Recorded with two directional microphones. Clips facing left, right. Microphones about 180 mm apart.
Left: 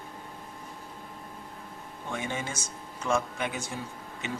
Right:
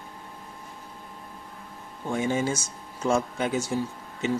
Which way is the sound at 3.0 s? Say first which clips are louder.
Right 4 dB; 35° right (ahead or behind).